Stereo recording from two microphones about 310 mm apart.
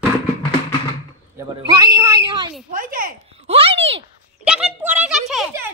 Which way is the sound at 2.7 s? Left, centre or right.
Right.